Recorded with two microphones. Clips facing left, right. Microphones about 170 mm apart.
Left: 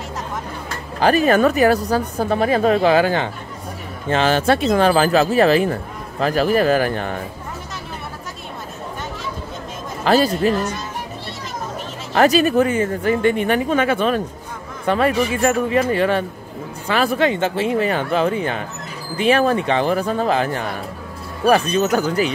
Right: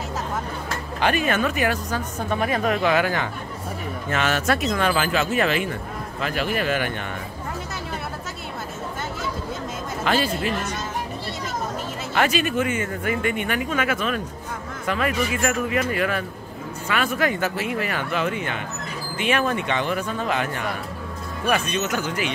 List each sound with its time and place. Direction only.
0.9 s speech: 35° left (ahead or behind)
10.0 s speech: 40° left (ahead or behind)
12.1 s speech: 35° left (ahead or behind)